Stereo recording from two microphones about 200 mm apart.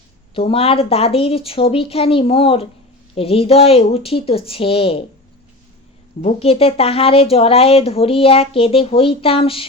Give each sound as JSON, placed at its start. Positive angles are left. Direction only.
{"t": 0.3, "sound": "a woman's voice", "side_deg": 30}
{"t": 6.2, "sound": "a woman's voice", "side_deg": 30}